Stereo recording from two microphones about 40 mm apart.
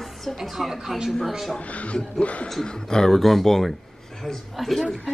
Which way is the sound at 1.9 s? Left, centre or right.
Left.